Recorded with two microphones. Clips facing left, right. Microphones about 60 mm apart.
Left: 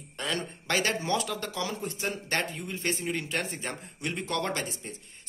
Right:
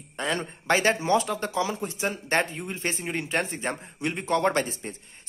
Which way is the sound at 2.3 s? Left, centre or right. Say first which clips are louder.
Right 7 dB; right.